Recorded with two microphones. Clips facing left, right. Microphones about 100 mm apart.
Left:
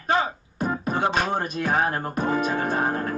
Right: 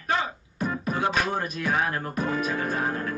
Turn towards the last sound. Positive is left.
turn(degrees=35)  # may be behind; listen again after turning